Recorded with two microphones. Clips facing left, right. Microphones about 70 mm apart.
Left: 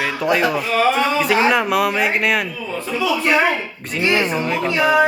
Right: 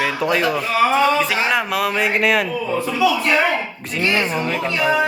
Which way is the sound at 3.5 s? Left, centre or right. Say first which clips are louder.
Even; centre.